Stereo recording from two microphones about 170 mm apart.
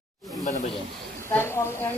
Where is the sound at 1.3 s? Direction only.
15° left (ahead or behind).